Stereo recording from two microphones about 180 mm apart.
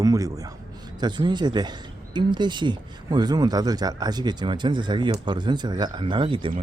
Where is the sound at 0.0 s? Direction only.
20° right (ahead or behind).